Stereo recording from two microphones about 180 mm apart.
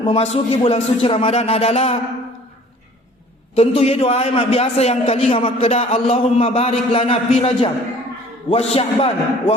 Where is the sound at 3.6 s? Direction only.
35° left (ahead or behind).